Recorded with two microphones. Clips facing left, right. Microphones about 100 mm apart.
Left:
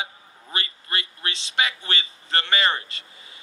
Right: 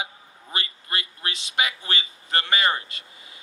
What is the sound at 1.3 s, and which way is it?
A man's voice, 30° left (ahead or behind).